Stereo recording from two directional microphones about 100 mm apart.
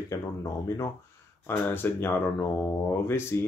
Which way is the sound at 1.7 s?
20° left (ahead or behind).